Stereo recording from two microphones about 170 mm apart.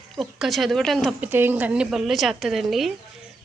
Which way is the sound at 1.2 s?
10° right (ahead or behind).